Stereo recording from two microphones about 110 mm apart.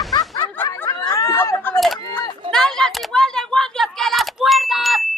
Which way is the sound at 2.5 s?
5° left (ahead or behind).